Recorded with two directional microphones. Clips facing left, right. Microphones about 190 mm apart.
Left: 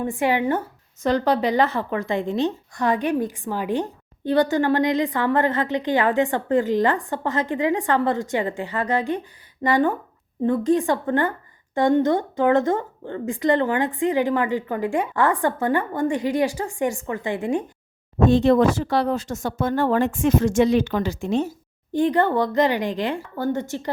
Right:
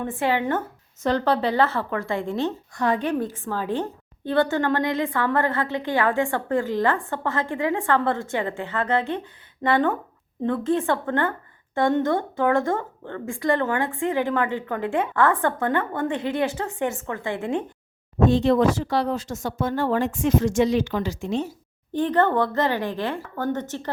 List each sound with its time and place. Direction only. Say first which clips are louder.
0.0 s a woman's voice: left 2 dB; 15° left (ahead or behind)
18.3 s speech: left 3 dB; 50° left (ahead or behind)
21.9 s a woman's voice: left 1 dB; 10° left (ahead or behind)